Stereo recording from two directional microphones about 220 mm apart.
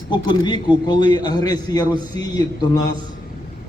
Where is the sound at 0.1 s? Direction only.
20° left (ahead or behind).